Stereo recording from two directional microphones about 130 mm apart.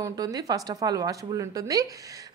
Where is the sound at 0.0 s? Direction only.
30° right (ahead or behind).